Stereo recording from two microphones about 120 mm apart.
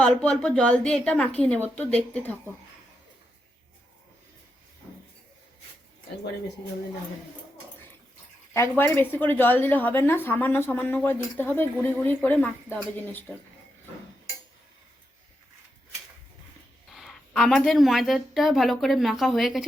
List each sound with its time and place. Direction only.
0.0 s a woman's voice: 10° left (ahead or behind)
8.5 s a woman's voice: 20° left (ahead or behind)
16.9 s a woman's voice: centre (ahead or behind)